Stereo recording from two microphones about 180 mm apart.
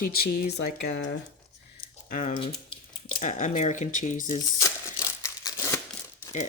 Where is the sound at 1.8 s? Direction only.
45° left (ahead or behind).